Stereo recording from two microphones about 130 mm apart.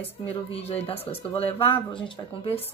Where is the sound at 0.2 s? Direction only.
45° left (ahead or behind).